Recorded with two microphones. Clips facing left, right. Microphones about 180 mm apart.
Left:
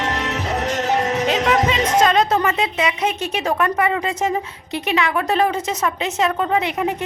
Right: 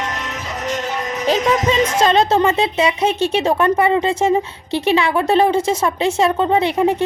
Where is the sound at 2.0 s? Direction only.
30° right (ahead or behind).